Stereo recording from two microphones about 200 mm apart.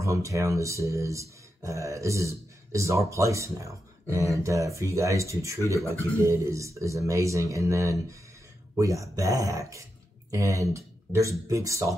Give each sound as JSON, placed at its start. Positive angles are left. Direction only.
{"t": 0.0, "sound": "speech", "side_deg": -15}